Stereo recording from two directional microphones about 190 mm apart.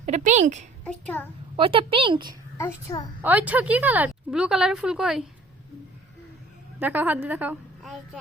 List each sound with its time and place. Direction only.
0.0 s a woman's voice: 40° right (ahead or behind)
0.9 s a child's voice: 10° left (ahead or behind)
1.5 s a woman's voice: 30° right (ahead or behind)
2.6 s a child's voice: 15° left (ahead or behind)
3.2 s speech: 10° right (ahead or behind)
6.7 s a woman's voice: 10° right (ahead or behind)